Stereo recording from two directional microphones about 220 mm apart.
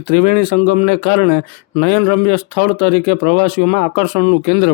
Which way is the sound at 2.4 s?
40° left (ahead or behind).